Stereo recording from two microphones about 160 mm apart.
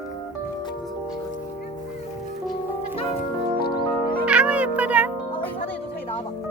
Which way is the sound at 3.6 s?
75° left (ahead or behind).